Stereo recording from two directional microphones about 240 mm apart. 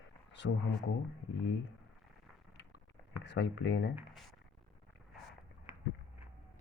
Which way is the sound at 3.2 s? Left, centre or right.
Left.